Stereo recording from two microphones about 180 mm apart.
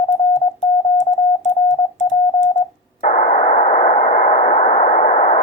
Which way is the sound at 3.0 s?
45° left (ahead or behind).